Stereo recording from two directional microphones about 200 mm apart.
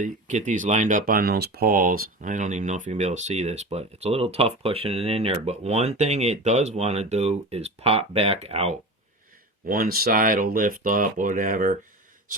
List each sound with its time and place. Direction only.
0.0 s speech: 35° right (ahead or behind)
9.6 s speech: 45° right (ahead or behind)